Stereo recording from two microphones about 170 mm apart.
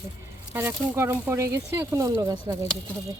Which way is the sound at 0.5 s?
15° right (ahead or behind).